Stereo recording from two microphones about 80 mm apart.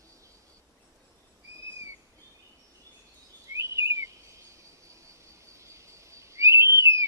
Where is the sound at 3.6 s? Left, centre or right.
Right.